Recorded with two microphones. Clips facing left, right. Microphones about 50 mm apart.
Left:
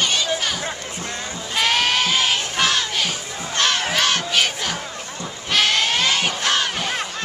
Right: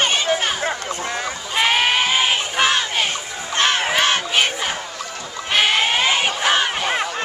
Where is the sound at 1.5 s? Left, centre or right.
Centre.